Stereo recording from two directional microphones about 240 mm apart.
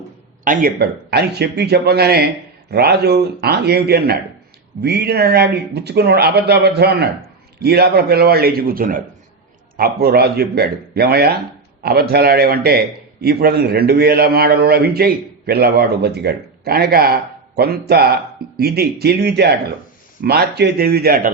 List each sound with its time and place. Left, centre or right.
0.4 s a man's voice: right